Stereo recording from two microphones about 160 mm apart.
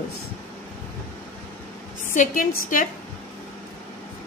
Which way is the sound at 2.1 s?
60° left (ahead or behind).